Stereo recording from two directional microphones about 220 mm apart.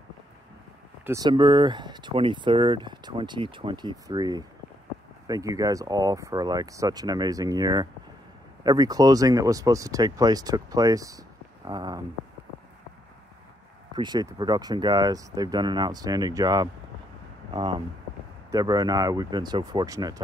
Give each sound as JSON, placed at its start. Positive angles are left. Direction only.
{"t": 1.0, "sound": "speech", "side_deg": -15}
{"t": 13.9, "sound": "speech", "side_deg": -20}